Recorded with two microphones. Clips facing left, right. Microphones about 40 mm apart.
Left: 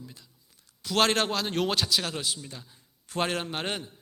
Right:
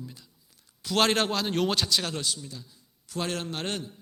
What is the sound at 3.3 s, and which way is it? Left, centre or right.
Speech, centre.